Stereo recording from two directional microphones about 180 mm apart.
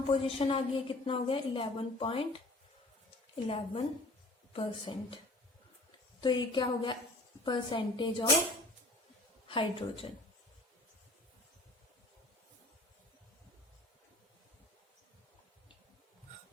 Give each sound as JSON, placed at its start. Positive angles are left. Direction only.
{"t": 0.1, "sound": "a woman's voice", "side_deg": 35}
{"t": 3.3, "sound": "a woman's voice", "side_deg": 35}
{"t": 6.2, "sound": "a woman's voice", "side_deg": 25}
{"t": 9.5, "sound": "a woman's voice", "side_deg": 30}